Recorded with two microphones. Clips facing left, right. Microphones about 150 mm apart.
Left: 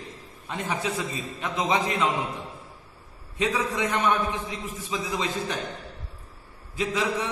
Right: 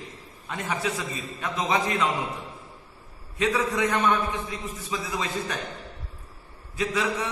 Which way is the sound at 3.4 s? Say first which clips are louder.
Right 2 dB; 15° left (ahead or behind).